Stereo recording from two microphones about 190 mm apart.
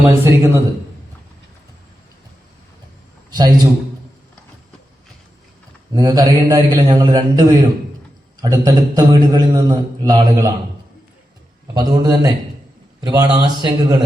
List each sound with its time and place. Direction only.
0.0 s a man's voice: 15° right (ahead or behind)
3.2 s a man's voice: 20° right (ahead or behind)
5.9 s a man's voice: 20° right (ahead or behind)
11.7 s a man's voice: 20° right (ahead or behind)